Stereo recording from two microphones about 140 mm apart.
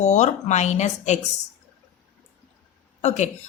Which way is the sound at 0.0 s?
55° left (ahead or behind).